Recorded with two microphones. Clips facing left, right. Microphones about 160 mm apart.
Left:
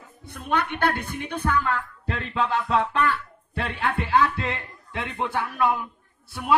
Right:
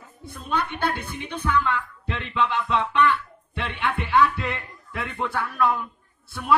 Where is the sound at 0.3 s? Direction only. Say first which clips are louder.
Left 2 dB; 60° left (ahead or behind).